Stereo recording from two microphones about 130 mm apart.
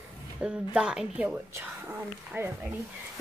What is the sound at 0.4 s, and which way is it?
Speech, 5° right (ahead or behind).